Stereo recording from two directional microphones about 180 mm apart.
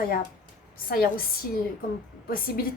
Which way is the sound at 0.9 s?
55° left (ahead or behind).